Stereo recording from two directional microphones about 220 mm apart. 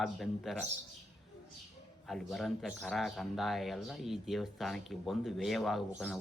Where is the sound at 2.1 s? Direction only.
Centre (ahead or behind).